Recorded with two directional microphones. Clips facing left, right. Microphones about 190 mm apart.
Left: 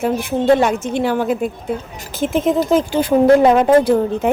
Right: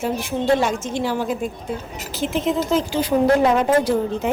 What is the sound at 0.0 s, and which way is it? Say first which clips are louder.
A woman's voice: left 5 dB; 55° left (ahead or behind).